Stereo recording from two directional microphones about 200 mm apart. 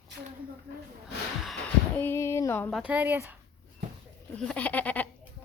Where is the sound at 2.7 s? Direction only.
5° right (ahead or behind).